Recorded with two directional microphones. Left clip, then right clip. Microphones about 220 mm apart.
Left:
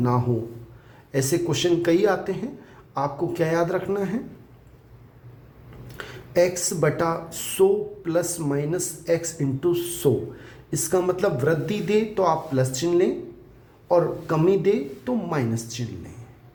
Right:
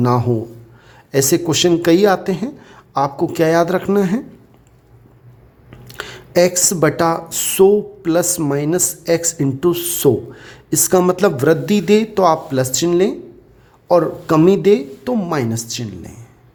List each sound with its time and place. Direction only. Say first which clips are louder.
0.0 s speech: right 7 dB; 50° right (ahead or behind)
5.9 s speech: right 8 dB; 50° right (ahead or behind)